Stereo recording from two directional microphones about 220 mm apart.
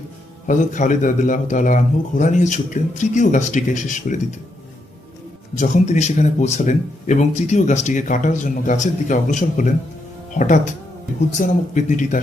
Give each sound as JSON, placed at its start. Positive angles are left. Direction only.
{"t": 0.4, "sound": "speech", "side_deg": 35}
{"t": 5.5, "sound": "speech", "side_deg": 35}